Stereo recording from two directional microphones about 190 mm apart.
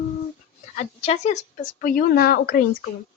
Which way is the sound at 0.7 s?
35° left (ahead or behind).